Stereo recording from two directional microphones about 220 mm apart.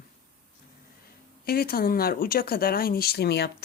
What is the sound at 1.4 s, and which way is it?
Speech, 45° left (ahead or behind).